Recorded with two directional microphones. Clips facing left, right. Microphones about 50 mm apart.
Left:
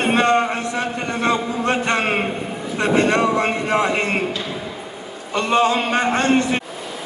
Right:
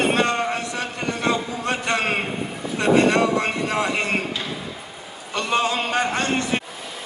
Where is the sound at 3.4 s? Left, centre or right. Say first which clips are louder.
Left 4 dB; left.